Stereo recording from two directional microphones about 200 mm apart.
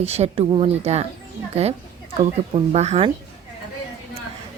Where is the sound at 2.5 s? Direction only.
30° right (ahead or behind).